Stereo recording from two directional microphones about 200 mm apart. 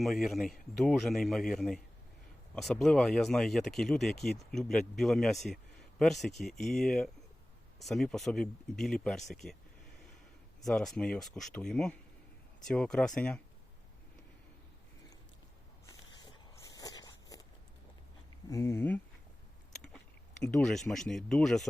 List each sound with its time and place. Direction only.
0.0 s speech: centre (ahead or behind)
10.6 s speech: centre (ahead or behind)
16.2 s a sound: 20° left (ahead or behind)
18.4 s speech: 15° left (ahead or behind)
20.4 s speech: 5° left (ahead or behind)